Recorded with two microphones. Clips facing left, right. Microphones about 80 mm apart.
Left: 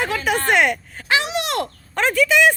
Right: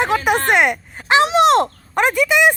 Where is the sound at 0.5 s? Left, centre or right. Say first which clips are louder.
Right 2 dB; centre.